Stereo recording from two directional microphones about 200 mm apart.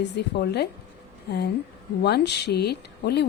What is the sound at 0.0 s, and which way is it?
Speech, 55° left (ahead or behind).